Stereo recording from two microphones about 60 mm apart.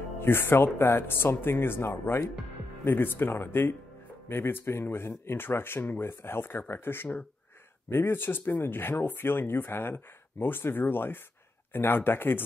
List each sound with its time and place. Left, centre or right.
0.2 s speech: left